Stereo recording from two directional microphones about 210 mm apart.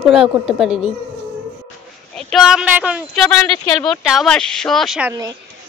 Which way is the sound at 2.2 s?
Centre (ahead or behind).